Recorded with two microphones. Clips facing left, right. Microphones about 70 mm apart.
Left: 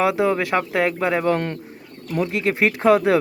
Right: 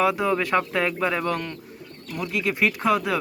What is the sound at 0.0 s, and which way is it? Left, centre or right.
Speech, left.